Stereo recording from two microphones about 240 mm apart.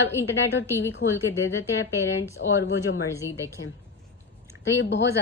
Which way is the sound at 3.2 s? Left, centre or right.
Centre.